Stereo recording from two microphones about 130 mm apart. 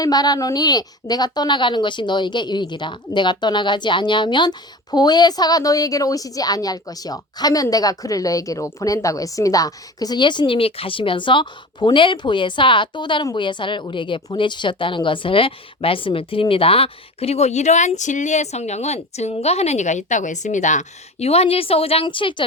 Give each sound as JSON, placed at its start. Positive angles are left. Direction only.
{"t": 0.0, "sound": "a woman's voice", "side_deg": 30}